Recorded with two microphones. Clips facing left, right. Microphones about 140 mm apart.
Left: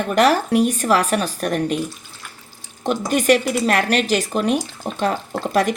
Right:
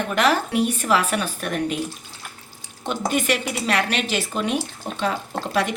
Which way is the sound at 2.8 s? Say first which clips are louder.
Left 6 dB; 45° left (ahead or behind).